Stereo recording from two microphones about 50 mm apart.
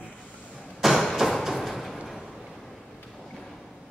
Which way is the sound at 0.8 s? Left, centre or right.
Centre.